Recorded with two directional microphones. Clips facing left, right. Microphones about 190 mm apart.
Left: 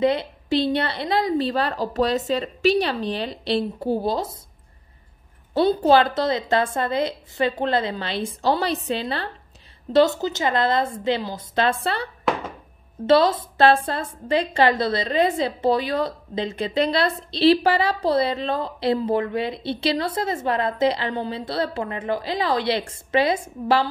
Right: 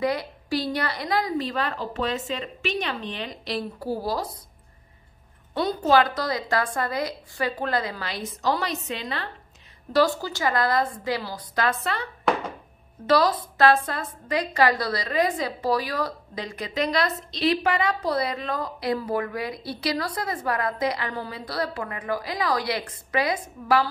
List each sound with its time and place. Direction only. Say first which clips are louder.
0.0 s a woman's voice: left 5 dB; 25° left (ahead or behind)
5.5 s a woman's voice: left 5 dB; 30° left (ahead or behind)
9.9 s a woman's voice: left 4 dB; 20° left (ahead or behind)